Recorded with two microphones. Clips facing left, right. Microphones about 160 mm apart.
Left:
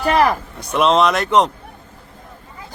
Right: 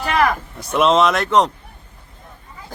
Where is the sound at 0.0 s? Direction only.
35° left (ahead or behind).